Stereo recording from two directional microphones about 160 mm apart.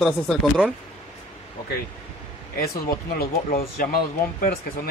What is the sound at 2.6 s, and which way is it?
Speech, 70° left (ahead or behind).